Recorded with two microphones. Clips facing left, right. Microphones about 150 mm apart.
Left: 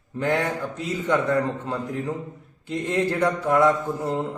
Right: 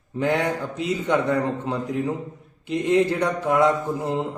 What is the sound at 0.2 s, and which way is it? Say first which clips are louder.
Speech: right 1 dB; 20° right (ahead or behind).